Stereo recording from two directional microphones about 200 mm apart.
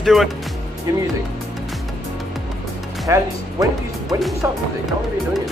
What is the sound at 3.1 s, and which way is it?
Speech, 15° right (ahead or behind).